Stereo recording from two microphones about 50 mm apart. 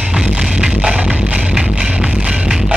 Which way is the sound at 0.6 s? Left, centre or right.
Centre.